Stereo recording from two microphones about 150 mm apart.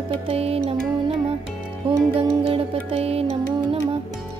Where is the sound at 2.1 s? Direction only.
40° right (ahead or behind).